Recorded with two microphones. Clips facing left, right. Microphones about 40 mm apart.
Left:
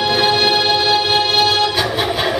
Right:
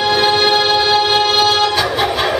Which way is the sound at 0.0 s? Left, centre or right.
Centre.